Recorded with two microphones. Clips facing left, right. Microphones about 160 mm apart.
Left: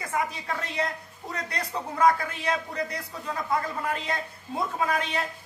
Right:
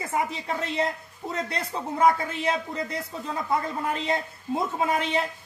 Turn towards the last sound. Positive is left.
turn(degrees=-25)  # may be behind; listen again after turning